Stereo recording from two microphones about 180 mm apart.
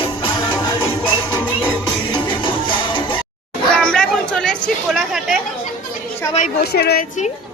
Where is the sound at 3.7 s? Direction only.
5° left (ahead or behind).